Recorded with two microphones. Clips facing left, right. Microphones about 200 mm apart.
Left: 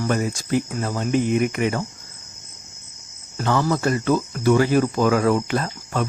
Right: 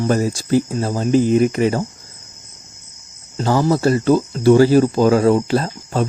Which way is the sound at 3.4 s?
30° right (ahead or behind).